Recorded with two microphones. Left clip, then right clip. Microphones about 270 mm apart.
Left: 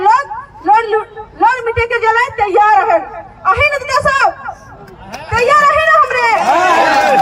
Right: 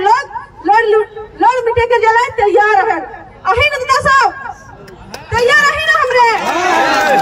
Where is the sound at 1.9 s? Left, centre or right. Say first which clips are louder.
Right 1 dB; centre.